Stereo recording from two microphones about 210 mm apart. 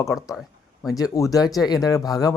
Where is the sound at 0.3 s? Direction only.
Centre (ahead or behind).